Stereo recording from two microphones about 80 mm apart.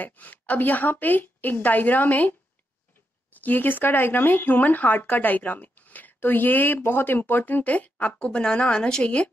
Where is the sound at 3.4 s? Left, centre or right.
Left.